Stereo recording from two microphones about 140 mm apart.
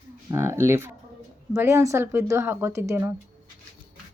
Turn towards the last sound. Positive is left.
turn(degrees=-20)  # may be behind; listen again after turning